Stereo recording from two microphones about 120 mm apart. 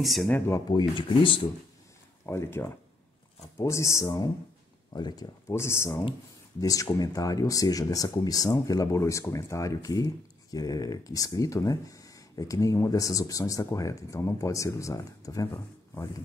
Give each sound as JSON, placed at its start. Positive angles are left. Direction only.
{"t": 0.0, "sound": "speech", "side_deg": 0}
{"t": 0.7, "sound": "speech", "side_deg": 40}
{"t": 2.2, "sound": "speech", "side_deg": 20}
{"t": 5.5, "sound": "speech", "side_deg": 20}